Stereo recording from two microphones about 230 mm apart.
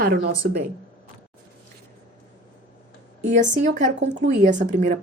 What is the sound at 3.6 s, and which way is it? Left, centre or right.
A woman's voice, right.